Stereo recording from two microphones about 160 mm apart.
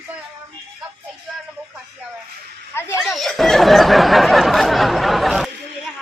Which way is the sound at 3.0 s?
Centre (ahead or behind).